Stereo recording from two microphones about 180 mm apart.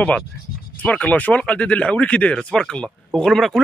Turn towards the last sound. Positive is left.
turn(degrees=0)  # may be behind; listen again after turning